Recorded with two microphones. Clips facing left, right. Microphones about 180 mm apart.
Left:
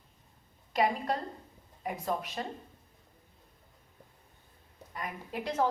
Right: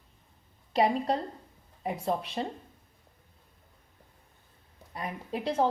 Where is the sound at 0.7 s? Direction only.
30° right (ahead or behind).